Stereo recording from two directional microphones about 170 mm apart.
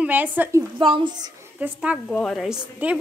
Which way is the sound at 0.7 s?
30° right (ahead or behind).